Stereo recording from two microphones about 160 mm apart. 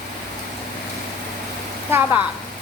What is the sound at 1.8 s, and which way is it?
Speech, 15° right (ahead or behind).